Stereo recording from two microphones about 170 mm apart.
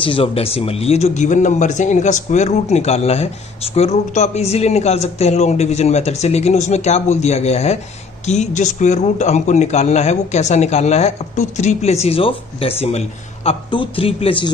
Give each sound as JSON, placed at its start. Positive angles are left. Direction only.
{"t": 0.0, "sound": "speech", "side_deg": 30}